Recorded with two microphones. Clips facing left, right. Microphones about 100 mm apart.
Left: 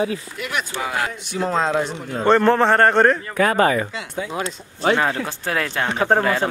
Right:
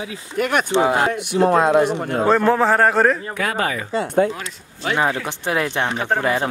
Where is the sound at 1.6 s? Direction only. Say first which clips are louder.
Right 5 dB; 10° right (ahead or behind).